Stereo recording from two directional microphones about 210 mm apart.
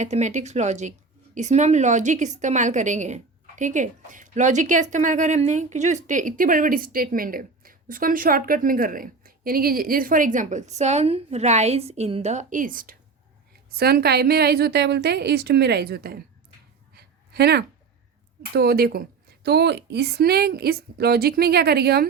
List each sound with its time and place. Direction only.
0.0 s a woman's voice: 35° right (ahead or behind)
16.9 s a sound: 50° right (ahead or behind)
18.5 s speech: 45° right (ahead or behind)